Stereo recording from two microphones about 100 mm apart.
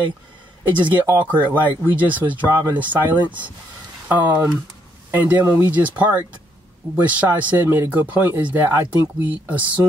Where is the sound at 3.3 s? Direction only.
15° right (ahead or behind).